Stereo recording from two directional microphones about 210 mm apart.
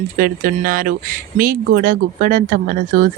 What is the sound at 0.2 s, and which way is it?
Speech, 40° right (ahead or behind).